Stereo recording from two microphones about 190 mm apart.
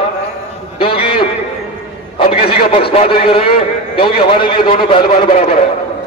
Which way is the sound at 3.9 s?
25° left (ahead or behind).